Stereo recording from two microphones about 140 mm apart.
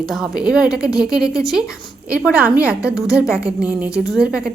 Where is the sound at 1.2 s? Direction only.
25° left (ahead or behind).